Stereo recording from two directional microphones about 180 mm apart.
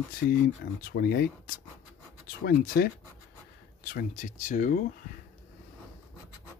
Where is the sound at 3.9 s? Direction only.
45° left (ahead or behind).